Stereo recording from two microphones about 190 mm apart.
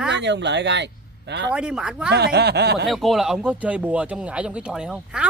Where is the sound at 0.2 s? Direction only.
65° right (ahead or behind).